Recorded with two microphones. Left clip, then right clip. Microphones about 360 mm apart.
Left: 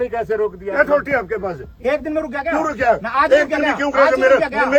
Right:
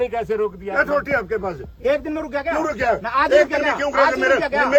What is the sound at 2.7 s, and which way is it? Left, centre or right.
Speech, right.